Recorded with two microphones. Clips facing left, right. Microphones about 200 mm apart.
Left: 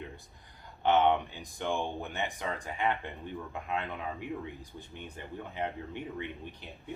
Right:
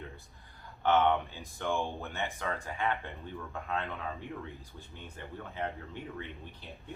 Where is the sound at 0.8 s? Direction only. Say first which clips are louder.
Left 1 dB; 20° left (ahead or behind).